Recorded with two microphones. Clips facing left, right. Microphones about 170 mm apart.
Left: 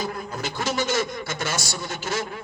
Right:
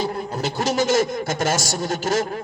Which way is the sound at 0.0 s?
40° right (ahead or behind).